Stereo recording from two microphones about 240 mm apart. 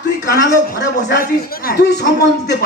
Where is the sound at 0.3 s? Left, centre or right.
Left.